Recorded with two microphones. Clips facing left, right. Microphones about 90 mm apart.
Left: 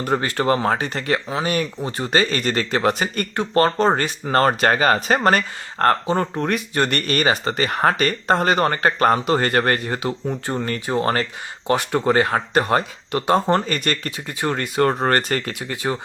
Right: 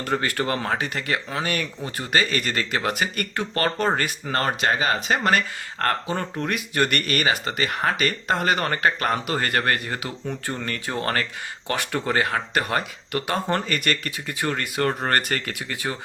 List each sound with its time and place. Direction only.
0.0 s speech: 25° left (ahead or behind)
1.3 s speech: 20° left (ahead or behind)